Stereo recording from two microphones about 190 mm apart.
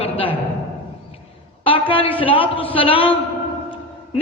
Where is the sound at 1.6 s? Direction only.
30° left (ahead or behind).